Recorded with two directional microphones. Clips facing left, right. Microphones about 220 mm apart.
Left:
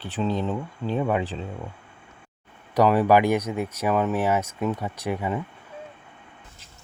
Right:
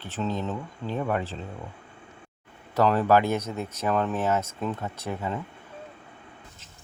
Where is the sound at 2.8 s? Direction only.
10° left (ahead or behind).